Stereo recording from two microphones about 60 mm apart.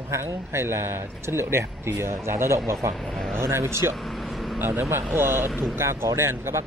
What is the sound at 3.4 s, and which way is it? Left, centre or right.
Speech, right.